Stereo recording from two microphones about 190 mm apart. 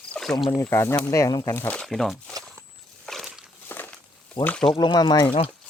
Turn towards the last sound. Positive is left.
turn(degrees=20)  # may be behind; listen again after turning